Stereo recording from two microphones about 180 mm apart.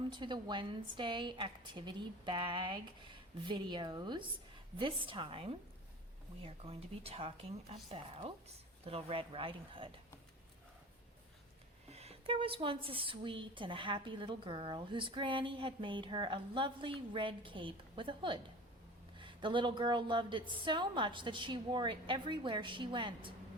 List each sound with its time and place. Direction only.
0.1 s a woman's voice: 25° right (ahead or behind)
11.9 s a woman's voice: 35° right (ahead or behind)